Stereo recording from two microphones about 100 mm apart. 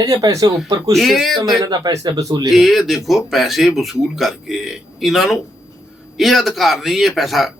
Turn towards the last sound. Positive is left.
turn(degrees=0)  # may be behind; listen again after turning